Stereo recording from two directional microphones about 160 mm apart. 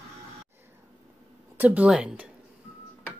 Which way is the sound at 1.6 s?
10° right (ahead or behind).